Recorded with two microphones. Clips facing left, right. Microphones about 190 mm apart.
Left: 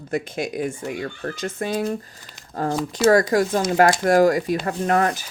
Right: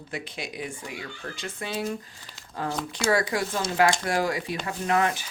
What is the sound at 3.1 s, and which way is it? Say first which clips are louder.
Speech: left 7 dB; 45° left (ahead or behind).